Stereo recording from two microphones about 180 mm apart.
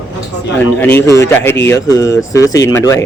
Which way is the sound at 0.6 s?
10° left (ahead or behind).